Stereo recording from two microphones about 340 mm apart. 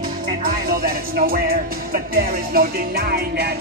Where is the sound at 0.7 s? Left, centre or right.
Right.